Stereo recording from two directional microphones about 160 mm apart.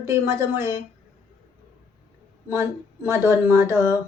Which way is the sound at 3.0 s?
15° right (ahead or behind).